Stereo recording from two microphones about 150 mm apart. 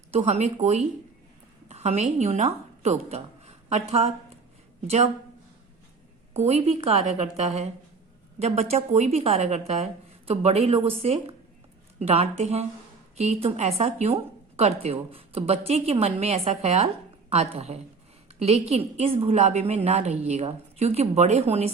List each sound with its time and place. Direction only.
0.1 s a woman's voice: 45° right (ahead or behind)
6.3 s a woman's voice: 45° right (ahead or behind)